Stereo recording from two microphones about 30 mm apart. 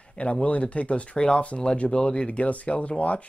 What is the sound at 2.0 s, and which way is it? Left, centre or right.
Speech, left.